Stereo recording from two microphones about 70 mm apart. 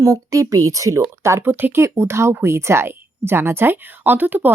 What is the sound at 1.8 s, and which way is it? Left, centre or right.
Speech, right.